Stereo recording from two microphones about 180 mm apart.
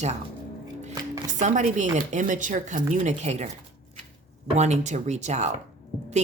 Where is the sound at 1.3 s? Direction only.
40° right (ahead or behind).